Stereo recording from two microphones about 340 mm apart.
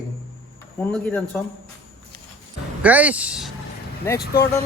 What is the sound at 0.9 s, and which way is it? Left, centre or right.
Speech, centre.